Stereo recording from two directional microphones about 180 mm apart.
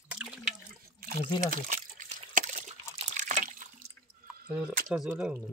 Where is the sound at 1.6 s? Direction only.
45° right (ahead or behind).